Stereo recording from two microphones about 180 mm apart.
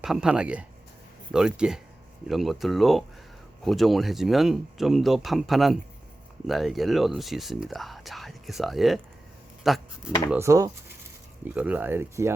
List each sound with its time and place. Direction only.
0.0 s speech: 5° right (ahead or behind)
10.3 s speech: 15° right (ahead or behind)